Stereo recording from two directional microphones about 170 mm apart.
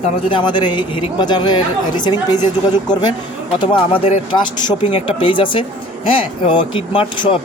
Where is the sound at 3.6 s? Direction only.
30° left (ahead or behind).